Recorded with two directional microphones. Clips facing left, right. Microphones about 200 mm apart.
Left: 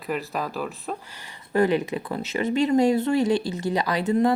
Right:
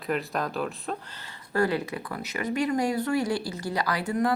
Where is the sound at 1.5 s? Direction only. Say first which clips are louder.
Left 5 dB; 20° left (ahead or behind).